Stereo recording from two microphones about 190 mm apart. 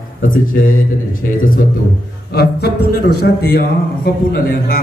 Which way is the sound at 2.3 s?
60° left (ahead or behind).